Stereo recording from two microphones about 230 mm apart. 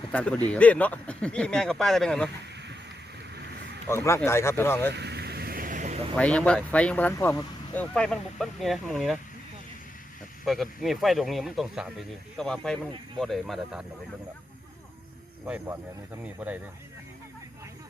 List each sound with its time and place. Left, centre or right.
0.1 s speech: centre
3.8 s speech: centre
4.9 s vehicle: right
6.1 s speech: centre
10.4 s speech: centre
15.4 s speech: centre